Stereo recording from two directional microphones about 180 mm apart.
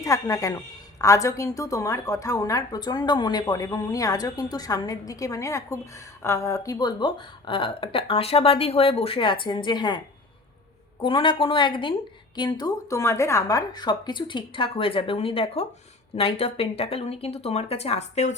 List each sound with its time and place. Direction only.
0.0 s a woman's voice: 15° left (ahead or behind)
11.0 s a woman's voice: 30° left (ahead or behind)